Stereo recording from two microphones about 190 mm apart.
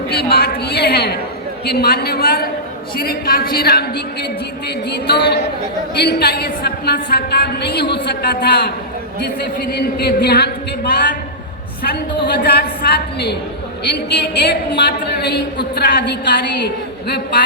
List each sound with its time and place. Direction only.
0.1 s a woman's voice: 55° left (ahead or behind)
11.8 s a woman's voice: 60° left (ahead or behind)